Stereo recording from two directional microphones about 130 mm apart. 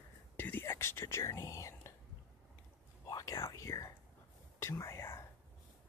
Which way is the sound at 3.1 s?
25° left (ahead or behind).